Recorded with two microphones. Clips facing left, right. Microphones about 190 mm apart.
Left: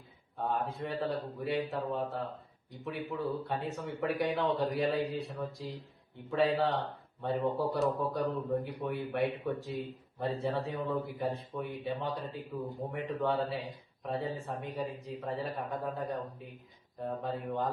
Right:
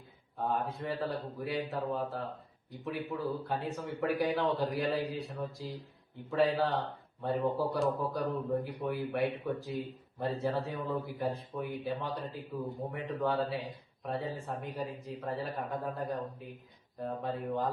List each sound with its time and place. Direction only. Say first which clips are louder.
0.3 s a man's voice: even; centre (ahead or behind)